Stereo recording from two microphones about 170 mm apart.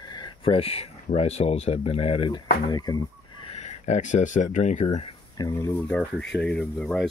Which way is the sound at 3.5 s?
45° left (ahead or behind).